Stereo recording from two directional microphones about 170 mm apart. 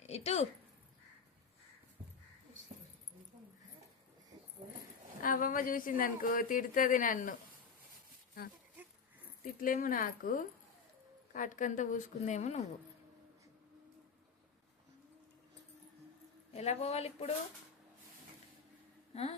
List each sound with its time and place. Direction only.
0.0 s a sound: 40° left (ahead or behind)
5.2 s speech: 55° left (ahead or behind)
9.4 s speech: 55° left (ahead or behind)
16.5 s speech: 40° left (ahead or behind)
19.1 s speech: 40° left (ahead or behind)